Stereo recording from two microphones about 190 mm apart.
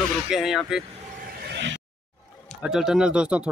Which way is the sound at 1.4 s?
65° right (ahead or behind).